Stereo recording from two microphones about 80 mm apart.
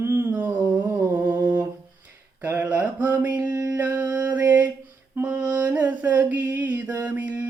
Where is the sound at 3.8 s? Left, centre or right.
Right.